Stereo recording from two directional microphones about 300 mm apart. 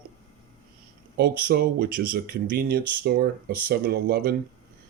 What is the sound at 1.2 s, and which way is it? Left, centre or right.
Speech, right.